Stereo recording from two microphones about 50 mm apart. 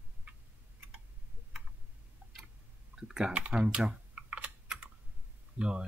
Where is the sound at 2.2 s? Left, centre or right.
Right.